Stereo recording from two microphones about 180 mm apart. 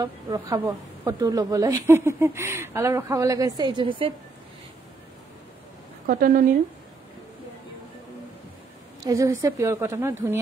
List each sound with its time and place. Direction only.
0.0 s speech: 20° right (ahead or behind)
6.0 s a woman's voice: 50° right (ahead or behind)
9.0 s speech: 15° right (ahead or behind)